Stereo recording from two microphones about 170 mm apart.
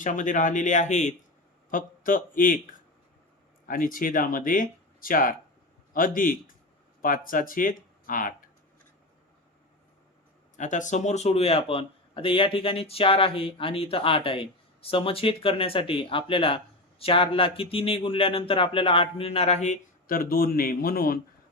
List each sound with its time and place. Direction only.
0.0 s speech: 50° left (ahead or behind)
3.7 s speech: 55° left (ahead or behind)
10.6 s speech: 45° left (ahead or behind)